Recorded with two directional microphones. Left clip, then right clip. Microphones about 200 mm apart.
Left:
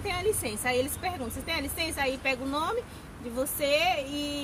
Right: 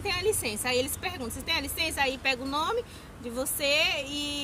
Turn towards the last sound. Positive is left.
turn(degrees=-30)  # may be behind; listen again after turning